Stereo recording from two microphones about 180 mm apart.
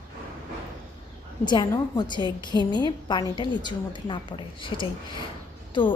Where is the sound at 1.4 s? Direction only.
25° left (ahead or behind).